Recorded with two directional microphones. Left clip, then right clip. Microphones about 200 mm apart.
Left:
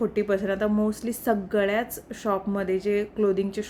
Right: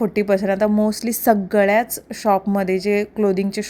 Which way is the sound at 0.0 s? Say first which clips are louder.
Right 6 dB; 30° right (ahead or behind).